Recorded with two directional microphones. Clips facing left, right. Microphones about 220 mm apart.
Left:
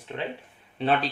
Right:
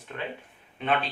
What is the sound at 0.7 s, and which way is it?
Speech, 35° left (ahead or behind).